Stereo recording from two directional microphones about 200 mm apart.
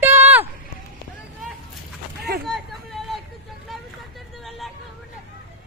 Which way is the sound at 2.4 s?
Centre (ahead or behind).